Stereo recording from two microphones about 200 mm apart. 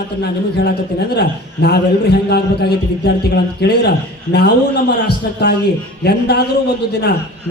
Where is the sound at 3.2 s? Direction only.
55° left (ahead or behind).